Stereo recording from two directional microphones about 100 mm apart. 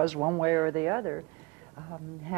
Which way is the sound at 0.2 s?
25° right (ahead or behind).